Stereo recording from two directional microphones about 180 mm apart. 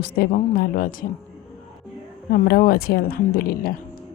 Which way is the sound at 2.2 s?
55° left (ahead or behind).